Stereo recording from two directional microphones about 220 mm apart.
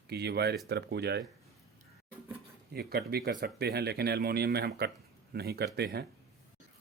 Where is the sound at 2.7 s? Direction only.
45° right (ahead or behind).